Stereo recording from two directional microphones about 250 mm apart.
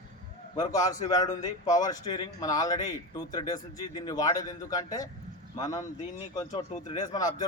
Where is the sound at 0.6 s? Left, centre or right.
Centre.